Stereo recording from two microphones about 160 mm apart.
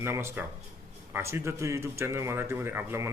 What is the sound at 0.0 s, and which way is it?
Speech, 15° right (ahead or behind).